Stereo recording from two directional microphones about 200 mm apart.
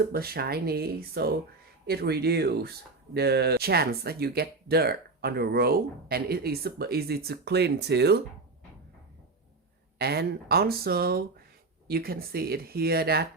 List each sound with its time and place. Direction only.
0.0 s speech: 50° right (ahead or behind)
10.0 s speech: 55° right (ahead or behind)